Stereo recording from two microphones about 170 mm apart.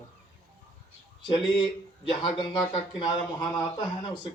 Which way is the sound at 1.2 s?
30° left (ahead or behind).